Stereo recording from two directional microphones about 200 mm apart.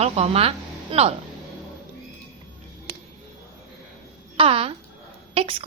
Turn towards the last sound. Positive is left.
turn(degrees=-30)  # may be behind; listen again after turning